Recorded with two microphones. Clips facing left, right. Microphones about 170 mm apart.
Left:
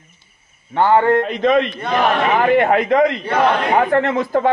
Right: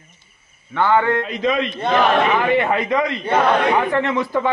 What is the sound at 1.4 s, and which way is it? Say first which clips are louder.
A man's voice: left 4 dB; 55° left (ahead or behind).